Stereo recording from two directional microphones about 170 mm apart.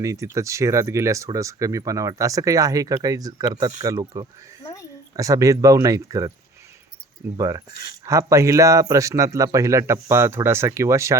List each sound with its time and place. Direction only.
0.0 s speech: 20° right (ahead or behind)
4.6 s a sound: 20° left (ahead or behind)
5.1 s speech: 20° right (ahead or behind)
7.3 s speech: 20° right (ahead or behind)